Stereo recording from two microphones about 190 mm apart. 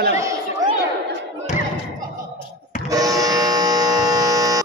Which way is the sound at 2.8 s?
20° right (ahead or behind).